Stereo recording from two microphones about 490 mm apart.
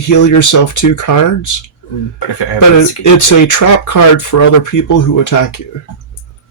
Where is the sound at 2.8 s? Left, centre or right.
Left.